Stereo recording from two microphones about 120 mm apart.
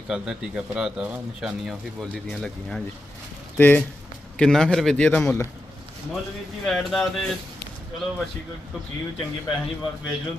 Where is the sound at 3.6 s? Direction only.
15° left (ahead or behind).